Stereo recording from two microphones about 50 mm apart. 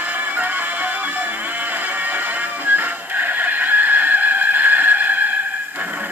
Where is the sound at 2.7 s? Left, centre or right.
Right.